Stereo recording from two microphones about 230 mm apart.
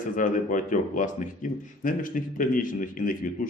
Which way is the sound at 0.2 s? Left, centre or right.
Left.